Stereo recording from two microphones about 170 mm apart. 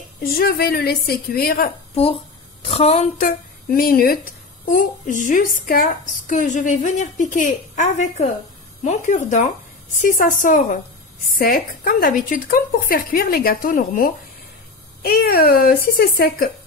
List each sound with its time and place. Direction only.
0.2 s speech: 60° left (ahead or behind)
2.6 s speech: 35° left (ahead or behind); by 4.2 s 60° left (ahead or behind)
4.6 s a woman's voice: 50° left (ahead or behind)